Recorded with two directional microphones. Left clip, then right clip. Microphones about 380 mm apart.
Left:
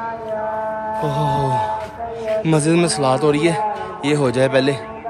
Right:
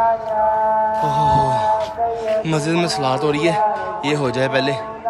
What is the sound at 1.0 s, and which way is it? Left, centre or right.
Speech, centre.